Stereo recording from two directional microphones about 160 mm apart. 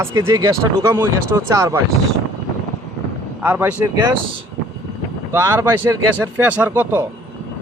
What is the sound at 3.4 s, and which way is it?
Speech, 10° right (ahead or behind).